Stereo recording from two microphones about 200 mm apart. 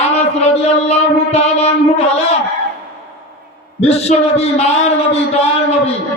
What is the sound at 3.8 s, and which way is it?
A man's voice, 30° left (ahead or behind).